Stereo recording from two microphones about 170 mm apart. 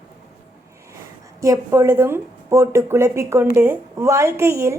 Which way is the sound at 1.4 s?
20° right (ahead or behind).